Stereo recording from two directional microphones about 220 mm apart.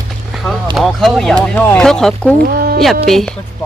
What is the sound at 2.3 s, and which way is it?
Speech, 40° right (ahead or behind).